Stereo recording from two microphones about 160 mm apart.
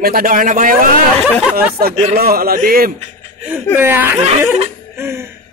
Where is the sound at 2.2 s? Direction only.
70° right (ahead or behind).